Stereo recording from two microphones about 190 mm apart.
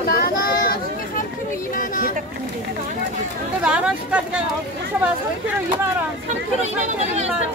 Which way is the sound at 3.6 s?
5° right (ahead or behind).